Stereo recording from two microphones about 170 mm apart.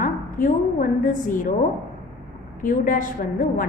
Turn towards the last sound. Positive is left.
turn(degrees=50)  # may be behind; listen again after turning